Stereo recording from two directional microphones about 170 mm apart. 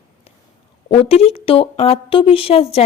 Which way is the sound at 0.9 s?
35° left (ahead or behind).